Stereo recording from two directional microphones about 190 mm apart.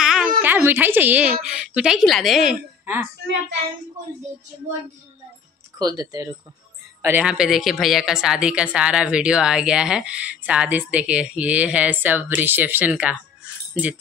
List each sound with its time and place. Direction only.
0.0 s a sound: 5° right (ahead or behind)
0.4 s a woman's voice: 10° right (ahead or behind)
5.8 s speech: 20° right (ahead or behind)
7.0 s a woman's voice: 10° right (ahead or behind)